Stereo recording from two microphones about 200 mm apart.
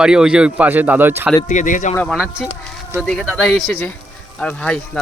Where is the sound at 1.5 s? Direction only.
40° left (ahead or behind).